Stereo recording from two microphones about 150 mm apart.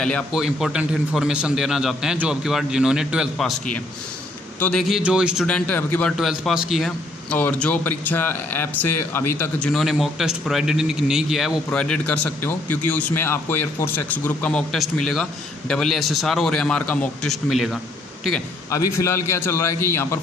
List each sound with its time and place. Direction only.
0.0 s a man's voice: centre (ahead or behind)
4.6 s a man's voice: 10° left (ahead or behind)
4.8 s a man's voice: 5° right (ahead or behind)
5.5 s speech: 10° left (ahead or behind)
6.1 s a man's voice: 5° right (ahead or behind)
7.3 s a man's voice: 10° left (ahead or behind)
18.7 s speech: 20° left (ahead or behind)